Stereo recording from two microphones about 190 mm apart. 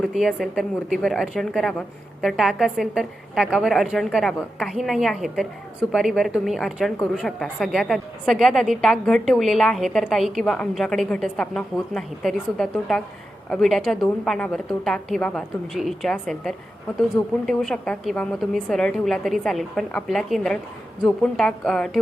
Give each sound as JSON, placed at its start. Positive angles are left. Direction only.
{"t": 0.0, "sound": "speech", "side_deg": 0}